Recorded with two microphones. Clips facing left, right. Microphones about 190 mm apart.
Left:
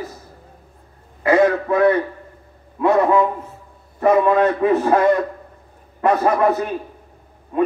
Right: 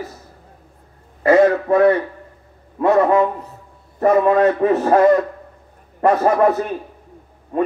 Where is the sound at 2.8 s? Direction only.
40° right (ahead or behind).